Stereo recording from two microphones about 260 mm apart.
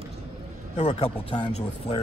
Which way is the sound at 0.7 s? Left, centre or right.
Left.